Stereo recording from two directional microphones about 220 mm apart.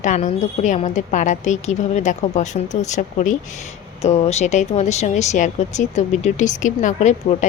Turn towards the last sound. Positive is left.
turn(degrees=30)  # may be behind; listen again after turning